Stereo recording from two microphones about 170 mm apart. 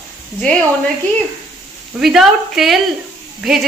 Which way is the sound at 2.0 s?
Centre (ahead or behind).